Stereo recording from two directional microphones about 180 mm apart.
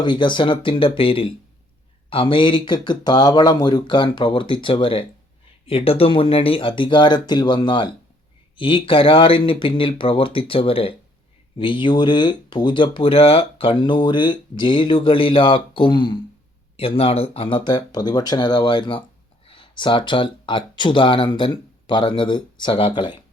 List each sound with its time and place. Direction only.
0.0 s speech: 25° left (ahead or behind)